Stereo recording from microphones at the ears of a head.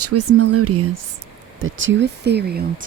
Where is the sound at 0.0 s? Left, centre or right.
Right.